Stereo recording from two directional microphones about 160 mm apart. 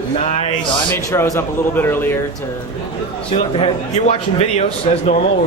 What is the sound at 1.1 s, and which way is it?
Speech, 15° left (ahead or behind).